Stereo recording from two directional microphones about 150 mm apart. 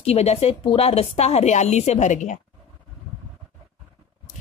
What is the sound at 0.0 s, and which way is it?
A woman's voice, 45° left (ahead or behind).